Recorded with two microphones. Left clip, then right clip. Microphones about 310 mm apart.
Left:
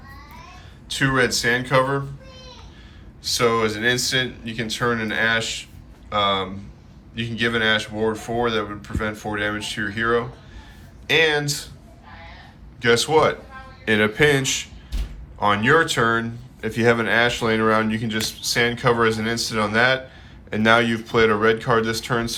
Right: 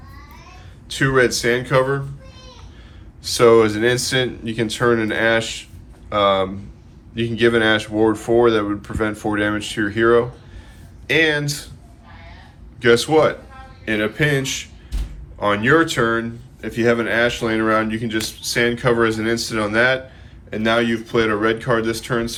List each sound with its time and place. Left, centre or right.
0.9 s speech: centre
3.2 s speech: centre
11.0 s speech: centre
12.8 s speech: centre